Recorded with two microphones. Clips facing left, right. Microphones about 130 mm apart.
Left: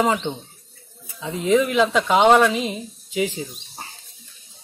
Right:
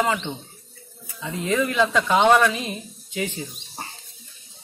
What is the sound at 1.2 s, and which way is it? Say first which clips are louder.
Speech: left 5 dB; 20° left (ahead or behind).